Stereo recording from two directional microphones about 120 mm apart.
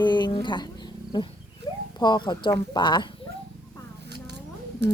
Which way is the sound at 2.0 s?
35° left (ahead or behind).